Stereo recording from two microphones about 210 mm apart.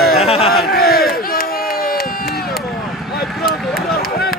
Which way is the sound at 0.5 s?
45° left (ahead or behind).